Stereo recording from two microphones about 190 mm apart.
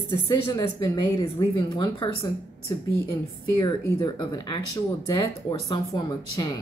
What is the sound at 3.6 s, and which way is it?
Speech, 25° left (ahead or behind).